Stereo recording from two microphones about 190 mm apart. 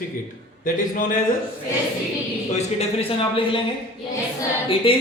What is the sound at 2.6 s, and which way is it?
A man's voice, 30° left (ahead or behind).